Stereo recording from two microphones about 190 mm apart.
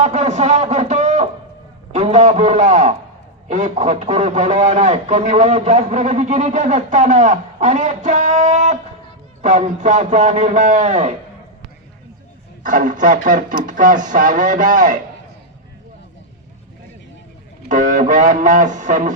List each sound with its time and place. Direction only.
0.0 s a man's voice: 40° right (ahead or behind)
12.6 s speech: 45° right (ahead or behind)
17.7 s a man's voice: 40° right (ahead or behind)